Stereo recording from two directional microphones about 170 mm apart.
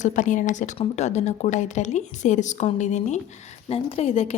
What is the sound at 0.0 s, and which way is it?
A woman's voice, 45° left (ahead or behind).